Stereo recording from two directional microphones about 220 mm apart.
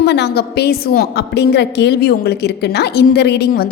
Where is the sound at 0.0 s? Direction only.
50° left (ahead or behind).